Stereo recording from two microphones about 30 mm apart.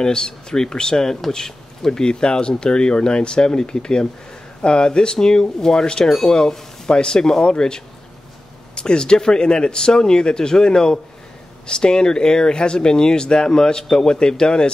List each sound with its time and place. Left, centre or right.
0.0 s speech: left
1.9 s speech: left
6.0 s speech: centre
6.3 s speech: left